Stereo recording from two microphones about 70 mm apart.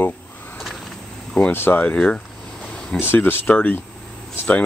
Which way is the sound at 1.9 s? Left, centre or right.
Centre.